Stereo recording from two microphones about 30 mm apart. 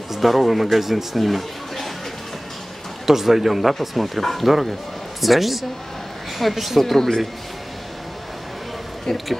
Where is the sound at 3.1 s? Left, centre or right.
Centre.